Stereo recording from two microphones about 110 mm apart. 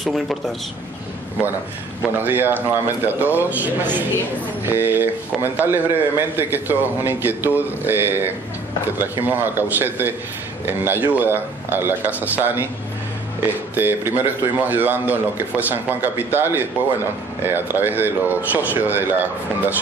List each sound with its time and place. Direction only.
0.0 s speech: centre (ahead or behind)
2.1 s a man's voice: 20° right (ahead or behind)